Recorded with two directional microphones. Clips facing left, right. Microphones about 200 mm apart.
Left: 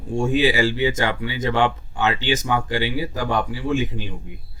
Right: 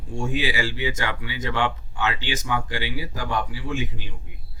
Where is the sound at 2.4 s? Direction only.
35° left (ahead or behind).